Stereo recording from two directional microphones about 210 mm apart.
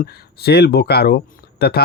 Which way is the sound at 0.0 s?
50° left (ahead or behind).